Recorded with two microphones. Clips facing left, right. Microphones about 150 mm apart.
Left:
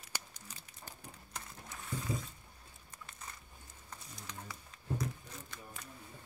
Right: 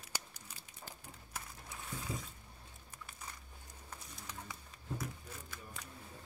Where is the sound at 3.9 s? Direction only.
10° right (ahead or behind).